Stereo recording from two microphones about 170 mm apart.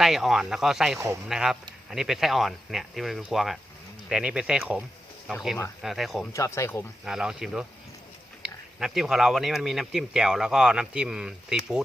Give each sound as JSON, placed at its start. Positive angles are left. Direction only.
{"t": 0.0, "sound": "speech", "side_deg": 0}
{"t": 0.9, "sound": "speech", "side_deg": -15}
{"t": 1.3, "sound": "speech", "side_deg": -5}
{"t": 6.3, "sound": "speech", "side_deg": 15}
{"t": 7.0, "sound": "speech", "side_deg": -5}